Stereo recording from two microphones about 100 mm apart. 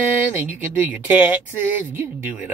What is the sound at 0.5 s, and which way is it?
Speech, 20° right (ahead or behind).